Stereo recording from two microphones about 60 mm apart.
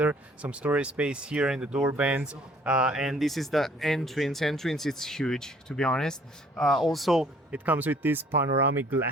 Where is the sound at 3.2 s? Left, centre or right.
Centre.